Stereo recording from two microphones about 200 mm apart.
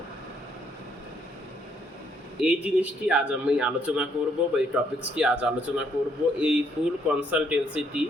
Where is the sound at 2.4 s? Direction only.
5° right (ahead or behind).